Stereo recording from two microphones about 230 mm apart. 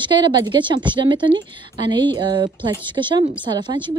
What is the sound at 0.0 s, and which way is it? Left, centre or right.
Speech, centre.